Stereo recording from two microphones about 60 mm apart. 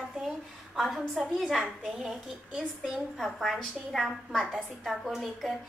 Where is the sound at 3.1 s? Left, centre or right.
Centre.